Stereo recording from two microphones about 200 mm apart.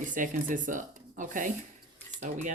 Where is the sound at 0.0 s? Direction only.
40° right (ahead or behind).